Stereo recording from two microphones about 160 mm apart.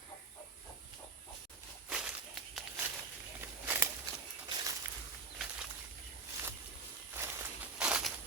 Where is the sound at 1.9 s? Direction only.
5° right (ahead or behind).